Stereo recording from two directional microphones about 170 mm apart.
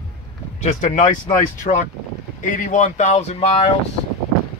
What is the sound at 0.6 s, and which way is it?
Speech, 45° left (ahead or behind).